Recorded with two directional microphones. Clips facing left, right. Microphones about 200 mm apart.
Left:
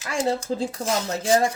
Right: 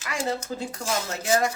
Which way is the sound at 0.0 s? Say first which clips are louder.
Left 4 dB; 30° left (ahead or behind).